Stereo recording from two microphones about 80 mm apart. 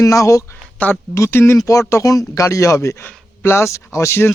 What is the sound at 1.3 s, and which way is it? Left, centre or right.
Speech, left.